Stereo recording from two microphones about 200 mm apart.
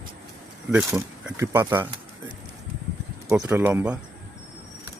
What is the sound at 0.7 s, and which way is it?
Speech, 5° right (ahead or behind).